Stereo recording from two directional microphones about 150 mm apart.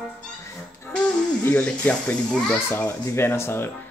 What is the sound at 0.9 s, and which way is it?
A child's voice, 10° left (ahead or behind).